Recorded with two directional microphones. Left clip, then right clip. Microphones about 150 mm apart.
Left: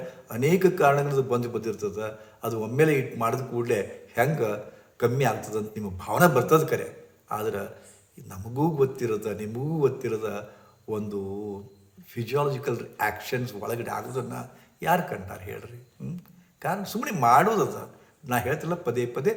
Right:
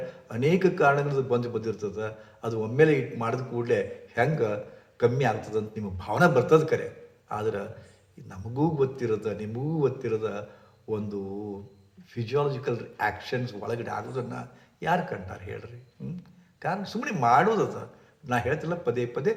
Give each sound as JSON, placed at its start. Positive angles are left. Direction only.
{"t": 0.3, "sound": "a man's voice", "side_deg": 15}